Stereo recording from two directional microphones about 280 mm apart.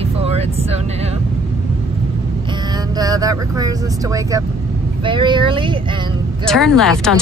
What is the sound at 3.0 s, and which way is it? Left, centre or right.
Speech, centre.